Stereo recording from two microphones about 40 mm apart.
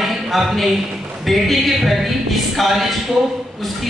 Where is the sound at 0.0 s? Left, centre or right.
Centre.